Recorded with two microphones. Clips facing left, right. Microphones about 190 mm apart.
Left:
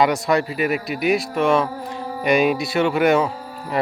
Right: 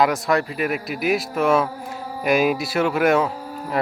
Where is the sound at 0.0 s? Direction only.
Centre (ahead or behind).